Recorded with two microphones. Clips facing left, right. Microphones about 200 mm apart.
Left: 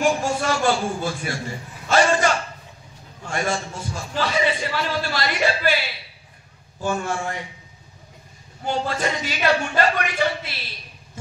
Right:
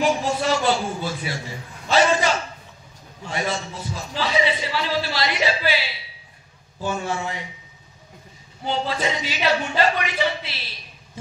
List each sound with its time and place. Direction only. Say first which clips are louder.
0.0 s a sound: even; 50° left (ahead or behind)
6.8 s a man's voice: left 1 dB; 45° left (ahead or behind)
8.6 s a man's voice: even; 50° left (ahead or behind)